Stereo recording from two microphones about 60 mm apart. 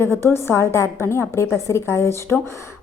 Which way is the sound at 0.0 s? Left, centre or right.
Left.